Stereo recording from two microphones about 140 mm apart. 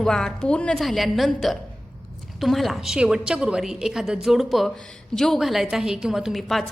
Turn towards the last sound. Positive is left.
turn(degrees=0)  # may be behind; listen again after turning